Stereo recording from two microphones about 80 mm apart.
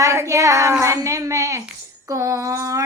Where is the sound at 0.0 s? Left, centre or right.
Right.